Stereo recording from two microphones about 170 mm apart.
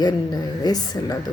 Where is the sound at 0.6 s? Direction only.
25° left (ahead or behind).